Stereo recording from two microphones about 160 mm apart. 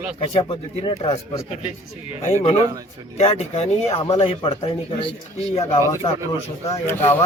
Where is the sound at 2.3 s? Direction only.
50° left (ahead or behind).